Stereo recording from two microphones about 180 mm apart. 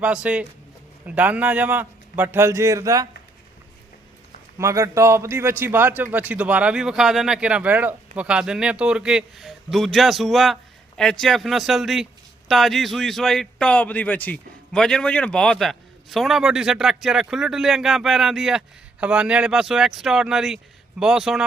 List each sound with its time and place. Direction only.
0.0 s a man's voice: 5° right (ahead or behind)
4.5 s a man's voice: 15° right (ahead or behind)